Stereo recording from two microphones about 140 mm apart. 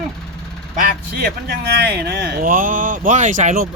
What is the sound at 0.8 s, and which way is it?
Speech, 90° right.